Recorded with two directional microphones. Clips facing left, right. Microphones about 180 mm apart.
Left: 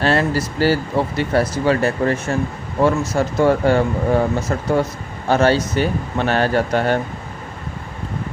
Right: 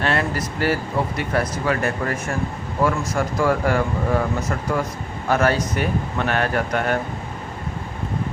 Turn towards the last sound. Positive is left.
turn(degrees=30)  # may be behind; listen again after turning